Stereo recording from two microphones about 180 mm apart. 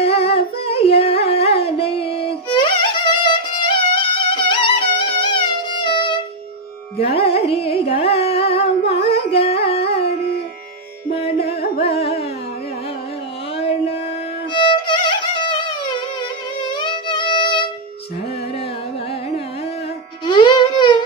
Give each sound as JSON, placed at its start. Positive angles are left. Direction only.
{"t": 0.2, "sound": "singing", "side_deg": 35}
{"t": 0.8, "sound": "carnatic music", "side_deg": 35}
{"t": 1.3, "sound": "music", "side_deg": 35}
{"t": 11.8, "sound": "carnatic music", "side_deg": 35}
{"t": 13.6, "sound": "music", "side_deg": 30}
{"t": 20.2, "sound": "music", "side_deg": 25}